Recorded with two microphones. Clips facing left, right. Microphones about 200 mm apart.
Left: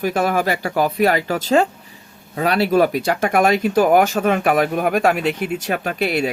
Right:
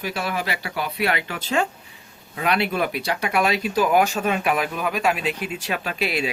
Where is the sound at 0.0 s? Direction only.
50° left (ahead or behind).